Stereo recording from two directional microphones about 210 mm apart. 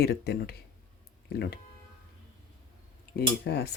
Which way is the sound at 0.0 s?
50° left (ahead or behind).